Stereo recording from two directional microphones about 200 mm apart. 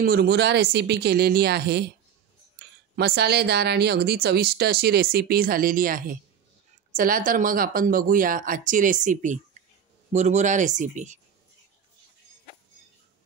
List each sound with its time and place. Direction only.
0.0 s speech: 50° right (ahead or behind)
2.6 s a sound: 55° right (ahead or behind)
3.0 s speech: 55° right (ahead or behind); by 11.1 s 40° right (ahead or behind)